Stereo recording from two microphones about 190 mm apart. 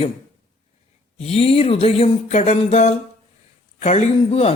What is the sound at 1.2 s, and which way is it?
Speech, 30° left (ahead or behind).